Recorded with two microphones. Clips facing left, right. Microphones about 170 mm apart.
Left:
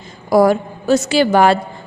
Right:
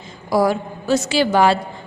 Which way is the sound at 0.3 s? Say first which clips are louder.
Left 5 dB; 50° left (ahead or behind).